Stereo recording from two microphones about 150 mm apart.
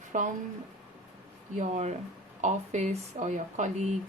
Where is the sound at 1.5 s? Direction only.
50° right (ahead or behind).